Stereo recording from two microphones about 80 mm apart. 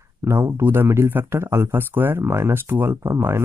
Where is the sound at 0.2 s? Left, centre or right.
Right.